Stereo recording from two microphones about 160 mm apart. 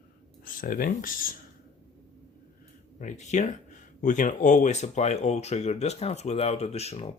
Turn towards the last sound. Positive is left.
turn(degrees=40)  # may be behind; listen again after turning